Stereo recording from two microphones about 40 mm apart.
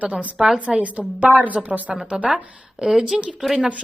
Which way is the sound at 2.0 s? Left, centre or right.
Right.